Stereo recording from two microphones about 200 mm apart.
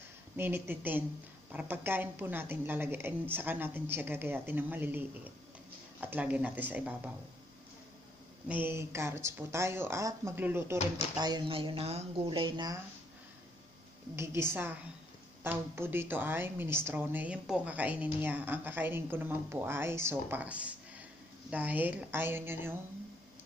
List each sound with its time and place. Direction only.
0.4 s a woman's voice: 10° right (ahead or behind)
8.5 s a woman's voice: 10° right (ahead or behind)
14.1 s a woman's voice: 15° right (ahead or behind)